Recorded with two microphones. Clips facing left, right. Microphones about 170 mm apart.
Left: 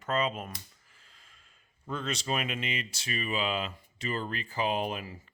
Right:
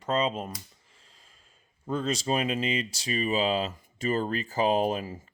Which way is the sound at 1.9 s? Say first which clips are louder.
Right 5 dB; 35° right (ahead or behind).